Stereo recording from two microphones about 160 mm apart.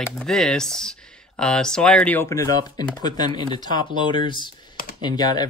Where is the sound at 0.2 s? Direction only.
5° left (ahead or behind).